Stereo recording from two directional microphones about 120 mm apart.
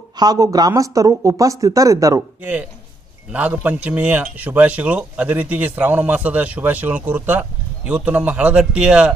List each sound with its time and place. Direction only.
0.2 s speech: 30° right (ahead or behind)
2.4 s speech: 10° right (ahead or behind)